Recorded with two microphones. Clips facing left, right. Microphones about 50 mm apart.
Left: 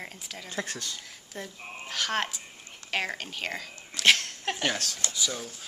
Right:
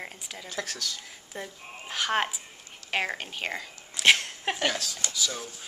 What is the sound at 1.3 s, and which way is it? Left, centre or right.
Speech, centre.